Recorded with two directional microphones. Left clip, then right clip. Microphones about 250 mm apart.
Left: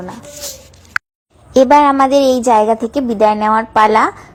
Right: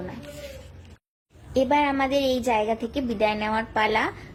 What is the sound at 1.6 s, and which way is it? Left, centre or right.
A woman's voice, left.